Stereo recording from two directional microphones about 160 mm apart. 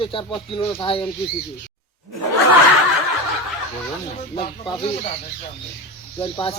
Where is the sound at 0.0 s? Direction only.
30° left (ahead or behind).